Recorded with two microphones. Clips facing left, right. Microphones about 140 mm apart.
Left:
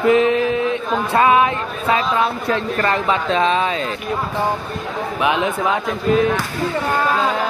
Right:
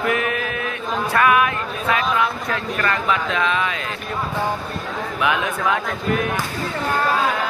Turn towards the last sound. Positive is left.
turn(degrees=20)  # may be behind; listen again after turning